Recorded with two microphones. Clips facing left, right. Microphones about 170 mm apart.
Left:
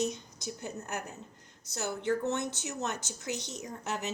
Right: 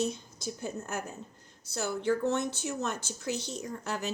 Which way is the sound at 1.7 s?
20° left (ahead or behind).